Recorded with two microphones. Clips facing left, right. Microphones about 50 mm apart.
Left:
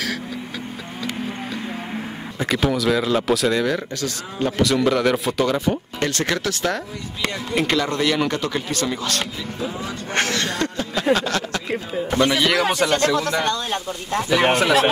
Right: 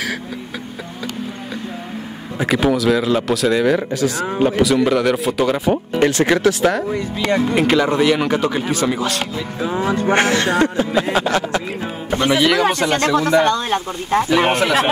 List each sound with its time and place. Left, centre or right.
2.3 s speech: centre
3.6 s speech: centre
5.4 s speech: centre
9.8 s speech: right
10.0 s speech: right
12.4 s speech: centre
13.1 s speech: centre
13.4 s speech: right
14.3 s speech: centre